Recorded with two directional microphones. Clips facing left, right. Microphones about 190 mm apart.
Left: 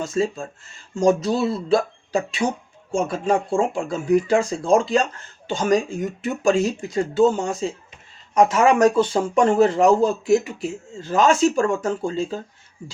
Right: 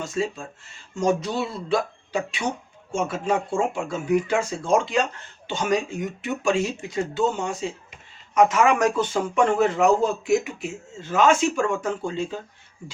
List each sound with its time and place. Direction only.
0.0 s speech: 40° left (ahead or behind)